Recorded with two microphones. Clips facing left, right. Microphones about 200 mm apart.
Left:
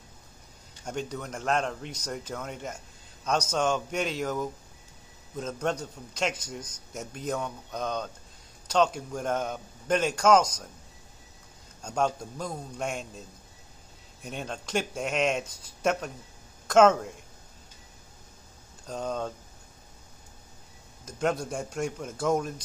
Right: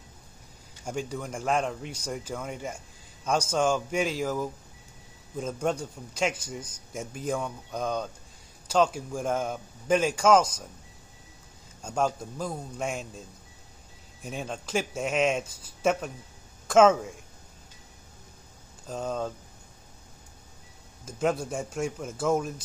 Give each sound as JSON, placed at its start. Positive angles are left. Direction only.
{"t": 0.8, "sound": "a man's voice", "side_deg": -10}
{"t": 11.8, "sound": "a man's voice", "side_deg": -5}
{"t": 14.2, "sound": "a man's voice", "side_deg": -5}
{"t": 18.9, "sound": "a man's voice", "side_deg": -5}
{"t": 21.0, "sound": "a man's voice", "side_deg": -5}